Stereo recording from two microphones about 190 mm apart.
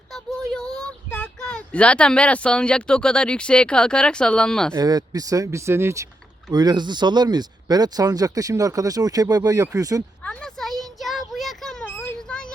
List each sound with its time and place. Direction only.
0.5 s speech: 5° left (ahead or behind)
4.7 s speech: 20° right (ahead or behind)
10.2 s a sound: centre (ahead or behind)